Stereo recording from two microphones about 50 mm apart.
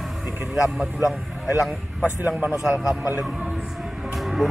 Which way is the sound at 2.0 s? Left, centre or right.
Right.